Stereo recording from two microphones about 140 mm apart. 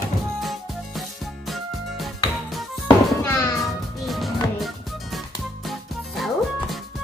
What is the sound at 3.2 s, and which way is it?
Music, 20° left (ahead or behind).